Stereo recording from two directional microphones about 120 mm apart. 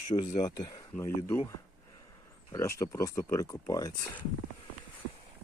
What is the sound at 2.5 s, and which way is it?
Speech, 25° left (ahead or behind).